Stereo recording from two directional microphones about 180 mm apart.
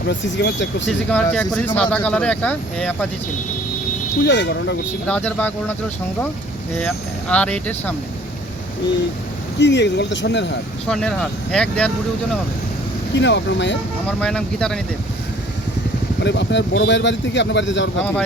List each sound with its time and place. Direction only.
0.1 s speech: 80° left
1.1 s speech: 5° left (ahead or behind)
4.2 s speech: 75° left (ahead or behind)
5.0 s speech: 10° left (ahead or behind)
6.7 s speech: 5° left (ahead or behind)
9.6 s speech: 80° left
10.8 s speech: 5° left (ahead or behind)
13.1 s speech: 80° left
14.2 s speech: 5° left (ahead or behind)
16.2 s speech: 75° left (ahead or behind)